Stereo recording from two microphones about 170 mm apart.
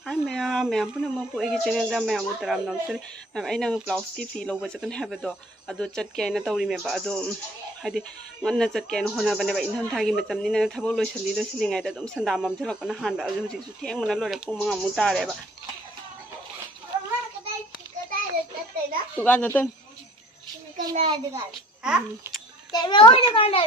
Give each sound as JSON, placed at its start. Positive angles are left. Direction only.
{"t": 0.0, "sound": "speech", "side_deg": 0}
{"t": 19.2, "sound": "speech", "side_deg": 10}
{"t": 20.9, "sound": "a child's voice", "side_deg": -35}
{"t": 21.8, "sound": "speech", "side_deg": -5}
{"t": 22.7, "sound": "a child's voice", "side_deg": 25}